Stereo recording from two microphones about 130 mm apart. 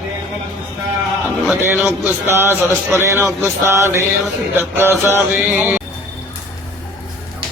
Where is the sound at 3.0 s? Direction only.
20° right (ahead or behind).